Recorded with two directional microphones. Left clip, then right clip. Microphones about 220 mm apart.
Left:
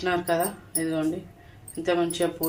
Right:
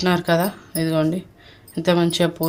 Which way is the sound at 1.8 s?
50° right (ahead or behind).